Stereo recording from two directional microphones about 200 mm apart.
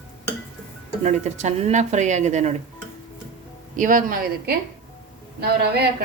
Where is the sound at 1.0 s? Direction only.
35° right (ahead or behind).